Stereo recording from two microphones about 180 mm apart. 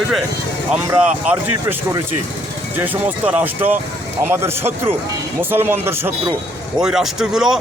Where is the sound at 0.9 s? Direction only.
15° right (ahead or behind).